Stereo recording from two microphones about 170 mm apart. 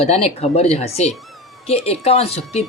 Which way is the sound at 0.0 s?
35° left (ahead or behind).